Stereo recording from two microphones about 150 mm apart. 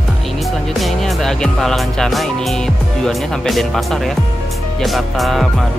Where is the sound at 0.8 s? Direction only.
Centre (ahead or behind).